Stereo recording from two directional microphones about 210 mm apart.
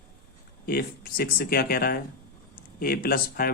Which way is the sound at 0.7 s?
45° left (ahead or behind).